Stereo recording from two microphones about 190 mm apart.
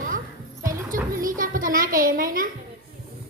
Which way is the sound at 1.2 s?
45° right (ahead or behind).